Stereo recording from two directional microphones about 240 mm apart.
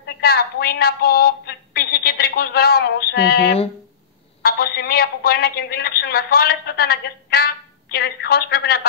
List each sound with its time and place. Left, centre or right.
0.0 s a woman's voice: left